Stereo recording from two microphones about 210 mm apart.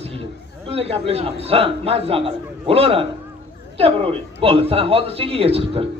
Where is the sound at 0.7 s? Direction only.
30° right (ahead or behind).